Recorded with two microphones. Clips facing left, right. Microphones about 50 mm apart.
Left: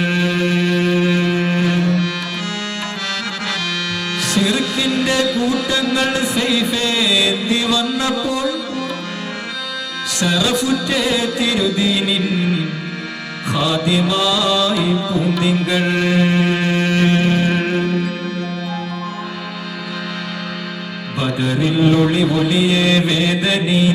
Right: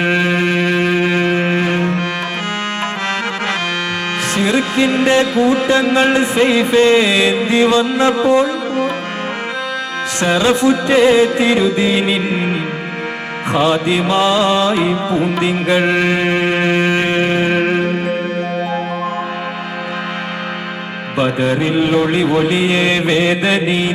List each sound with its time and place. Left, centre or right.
0.0 s music: right
4.4 s music: right
10.2 s music: right
21.2 s music: right